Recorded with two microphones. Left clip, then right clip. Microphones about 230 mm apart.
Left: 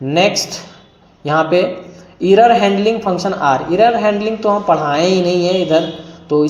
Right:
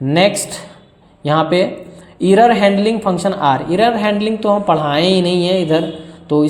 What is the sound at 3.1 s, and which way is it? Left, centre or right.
A man's voice, right.